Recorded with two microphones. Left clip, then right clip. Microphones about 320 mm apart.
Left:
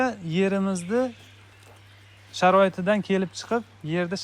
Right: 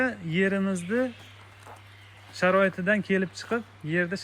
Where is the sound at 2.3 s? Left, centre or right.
Centre.